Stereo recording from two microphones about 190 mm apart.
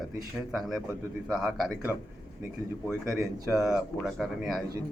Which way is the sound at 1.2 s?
5° right (ahead or behind).